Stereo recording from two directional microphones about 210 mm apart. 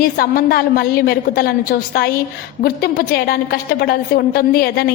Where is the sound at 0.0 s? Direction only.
45° left (ahead or behind).